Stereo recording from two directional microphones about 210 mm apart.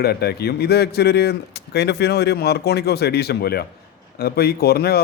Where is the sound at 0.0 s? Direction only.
50° left (ahead or behind).